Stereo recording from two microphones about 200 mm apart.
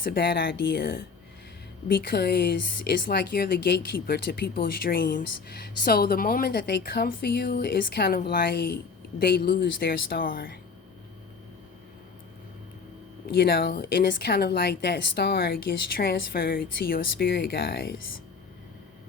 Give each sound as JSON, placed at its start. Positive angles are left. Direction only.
{"t": 0.0, "sound": "a woman's voice", "side_deg": 50}
{"t": 2.0, "sound": "a woman's voice", "side_deg": 55}
{"t": 13.2, "sound": "a woman's voice", "side_deg": 50}